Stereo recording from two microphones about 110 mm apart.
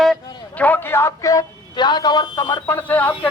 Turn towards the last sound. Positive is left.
turn(degrees=15)  # may be behind; listen again after turning